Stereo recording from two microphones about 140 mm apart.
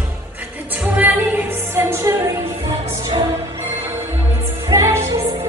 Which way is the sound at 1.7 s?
20° right (ahead or behind).